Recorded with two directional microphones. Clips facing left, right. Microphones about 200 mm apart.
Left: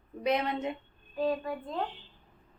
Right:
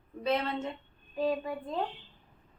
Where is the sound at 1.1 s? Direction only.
15° right (ahead or behind).